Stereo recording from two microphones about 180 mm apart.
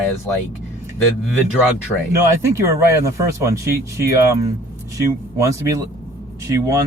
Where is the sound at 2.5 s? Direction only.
15° right (ahead or behind).